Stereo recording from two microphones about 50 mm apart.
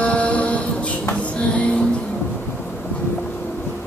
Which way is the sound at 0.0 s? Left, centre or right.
Left.